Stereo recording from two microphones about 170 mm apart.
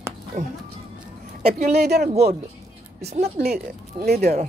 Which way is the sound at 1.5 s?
40° right (ahead or behind).